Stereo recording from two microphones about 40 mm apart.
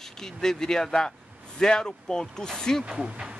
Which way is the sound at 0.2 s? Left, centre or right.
Centre.